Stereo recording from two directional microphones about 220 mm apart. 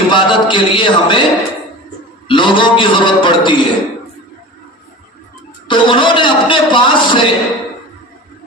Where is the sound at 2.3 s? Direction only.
20° left (ahead or behind).